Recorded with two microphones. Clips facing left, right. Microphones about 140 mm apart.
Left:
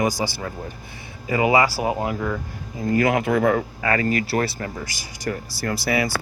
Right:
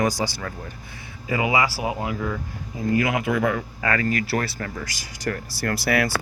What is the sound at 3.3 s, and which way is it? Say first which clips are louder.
Speech: left 4 dB; 40° left (ahead or behind).